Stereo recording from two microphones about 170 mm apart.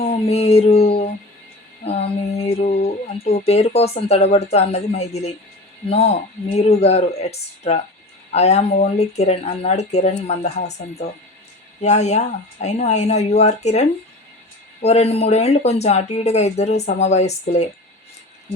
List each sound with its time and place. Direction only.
0.0 s music: 35° left (ahead or behind)
3.4 s speech: 35° left (ahead or behind)